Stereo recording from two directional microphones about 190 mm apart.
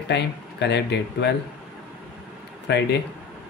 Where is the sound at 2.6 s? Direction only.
65° left (ahead or behind).